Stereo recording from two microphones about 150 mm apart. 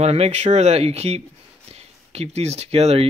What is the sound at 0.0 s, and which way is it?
Speech, 45° right (ahead or behind).